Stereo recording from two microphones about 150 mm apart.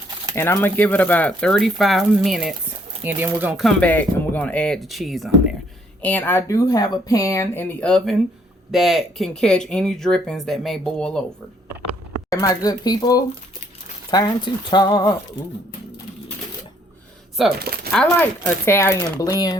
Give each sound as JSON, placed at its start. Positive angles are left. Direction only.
{"t": 0.3, "sound": "speech", "side_deg": 15}
{"t": 3.0, "sound": "speech", "side_deg": -15}
{"t": 3.5, "sound": "speech", "side_deg": 0}
{"t": 6.0, "sound": "speech", "side_deg": 10}
{"t": 12.3, "sound": "speech", "side_deg": 25}
{"t": 17.4, "sound": "speech", "side_deg": 0}
{"t": 17.9, "sound": "speech", "side_deg": 10}